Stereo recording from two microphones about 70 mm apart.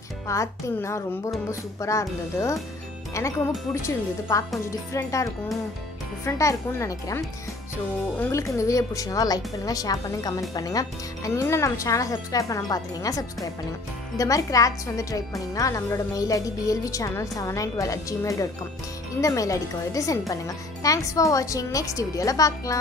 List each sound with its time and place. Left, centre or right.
0.3 s a woman's voice: left
8.5 s a woman's voice: left
11.3 s a woman's voice: left